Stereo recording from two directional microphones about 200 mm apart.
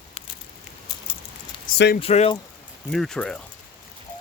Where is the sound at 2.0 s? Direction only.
30° left (ahead or behind).